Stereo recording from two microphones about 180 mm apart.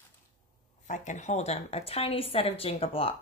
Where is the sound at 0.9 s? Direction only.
40° left (ahead or behind).